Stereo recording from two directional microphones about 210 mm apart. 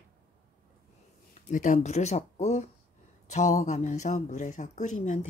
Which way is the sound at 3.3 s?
35° left (ahead or behind).